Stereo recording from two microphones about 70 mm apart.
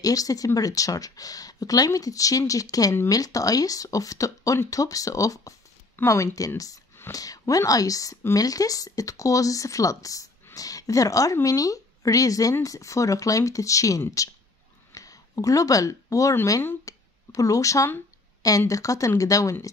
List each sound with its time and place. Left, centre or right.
0.0 s a woman's voice: left
16.8 s a sound: left
18.7 s speech: left